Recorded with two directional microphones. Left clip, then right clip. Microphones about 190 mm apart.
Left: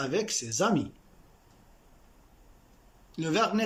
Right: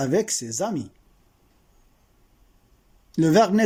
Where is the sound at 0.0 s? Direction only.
40° right (ahead or behind).